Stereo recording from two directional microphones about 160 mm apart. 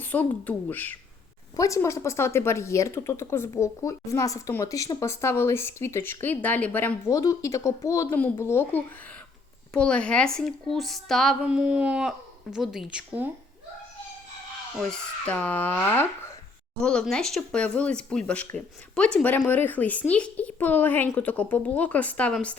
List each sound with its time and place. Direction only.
0.0 s a woman's voice: 10° left (ahead or behind); by 13.3 s 10° right (ahead or behind)
14.8 s speech: 10° left (ahead or behind)